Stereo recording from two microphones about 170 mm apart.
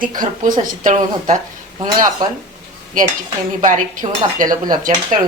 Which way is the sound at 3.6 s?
50° right (ahead or behind).